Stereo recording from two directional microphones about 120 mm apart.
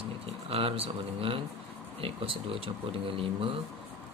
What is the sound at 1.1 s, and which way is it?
Speech, 50° right (ahead or behind).